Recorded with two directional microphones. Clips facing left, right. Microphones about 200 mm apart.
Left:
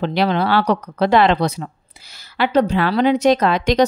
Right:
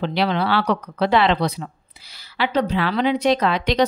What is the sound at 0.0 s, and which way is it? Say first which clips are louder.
A woman's voice: left 3 dB; 45° left (ahead or behind).